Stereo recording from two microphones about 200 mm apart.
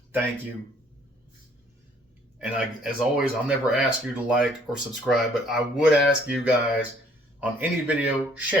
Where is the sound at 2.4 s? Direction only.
5° right (ahead or behind).